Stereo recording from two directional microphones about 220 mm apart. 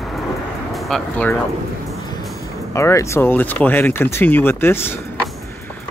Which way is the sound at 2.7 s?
15° left (ahead or behind).